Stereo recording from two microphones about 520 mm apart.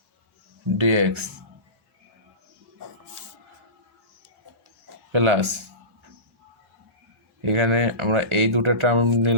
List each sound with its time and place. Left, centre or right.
0.8 s speech: right
5.1 s speech: right
7.4 s speech: right